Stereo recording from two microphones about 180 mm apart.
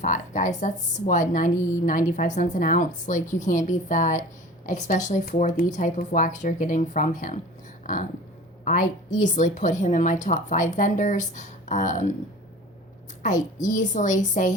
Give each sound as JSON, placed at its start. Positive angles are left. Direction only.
{"t": 0.0, "sound": "a woman's voice", "side_deg": 45}
{"t": 8.6, "sound": "a woman's voice", "side_deg": 45}
{"t": 13.2, "sound": "a woman's voice", "side_deg": 45}